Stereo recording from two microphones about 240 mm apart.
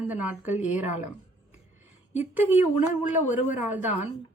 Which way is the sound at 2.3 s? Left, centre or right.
Centre.